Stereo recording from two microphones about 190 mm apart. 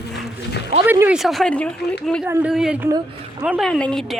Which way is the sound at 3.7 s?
5° left (ahead or behind).